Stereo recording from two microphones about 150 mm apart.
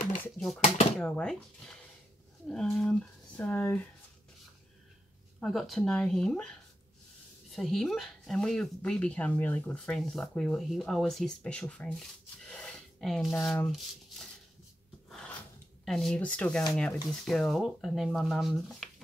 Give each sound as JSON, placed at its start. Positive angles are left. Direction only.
{"t": 0.9, "sound": "speech", "side_deg": 5}
{"t": 5.4, "sound": "speech", "side_deg": 0}
{"t": 15.0, "sound": "filing", "side_deg": 5}
{"t": 15.8, "sound": "speech", "side_deg": 0}